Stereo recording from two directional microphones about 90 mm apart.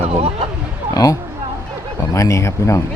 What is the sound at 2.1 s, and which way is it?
Speech, 35° left (ahead or behind).